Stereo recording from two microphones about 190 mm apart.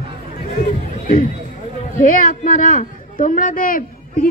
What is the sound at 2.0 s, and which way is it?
A woman's voice, 45° left (ahead or behind).